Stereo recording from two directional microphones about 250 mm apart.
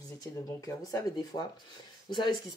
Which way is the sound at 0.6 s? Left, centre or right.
Centre.